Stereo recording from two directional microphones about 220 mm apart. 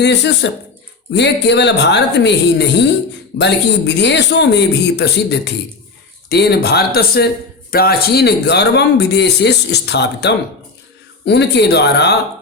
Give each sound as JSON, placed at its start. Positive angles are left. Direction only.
{"t": 0.0, "sound": "speech", "side_deg": 50}